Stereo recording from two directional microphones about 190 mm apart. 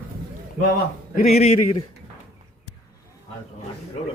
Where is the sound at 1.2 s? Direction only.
35° left (ahead or behind).